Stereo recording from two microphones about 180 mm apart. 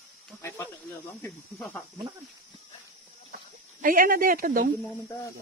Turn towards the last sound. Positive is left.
turn(degrees=-55)  # may be behind; listen again after turning